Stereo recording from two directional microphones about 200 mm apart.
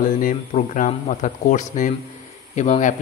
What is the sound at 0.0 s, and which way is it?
Speech, 40° left (ahead or behind).